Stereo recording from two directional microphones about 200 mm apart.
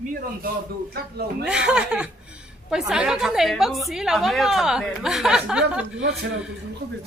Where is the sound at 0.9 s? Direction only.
50° right (ahead or behind).